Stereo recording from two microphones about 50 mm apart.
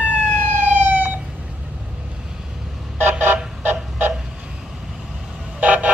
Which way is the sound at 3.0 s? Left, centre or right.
Right.